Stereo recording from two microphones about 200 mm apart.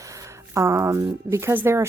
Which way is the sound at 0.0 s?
15° right (ahead or behind).